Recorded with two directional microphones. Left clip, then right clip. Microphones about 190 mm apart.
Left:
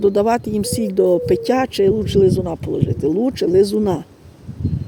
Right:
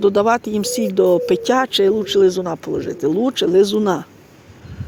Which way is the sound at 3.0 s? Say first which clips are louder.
Right 1 dB; 10° left (ahead or behind).